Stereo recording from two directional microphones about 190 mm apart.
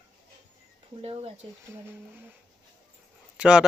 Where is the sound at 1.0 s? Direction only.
30° right (ahead or behind).